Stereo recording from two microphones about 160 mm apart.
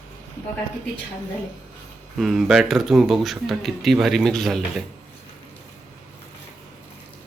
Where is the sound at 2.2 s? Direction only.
Centre (ahead or behind).